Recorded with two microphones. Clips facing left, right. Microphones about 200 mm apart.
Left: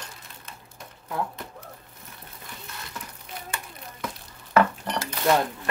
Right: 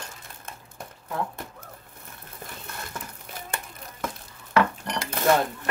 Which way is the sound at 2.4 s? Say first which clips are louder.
Right 4 dB; 50° right (ahead or behind).